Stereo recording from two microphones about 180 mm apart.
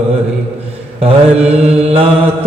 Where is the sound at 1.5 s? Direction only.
35° right (ahead or behind).